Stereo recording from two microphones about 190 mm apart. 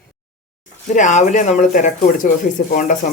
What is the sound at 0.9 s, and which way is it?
Speech, 40° left (ahead or behind).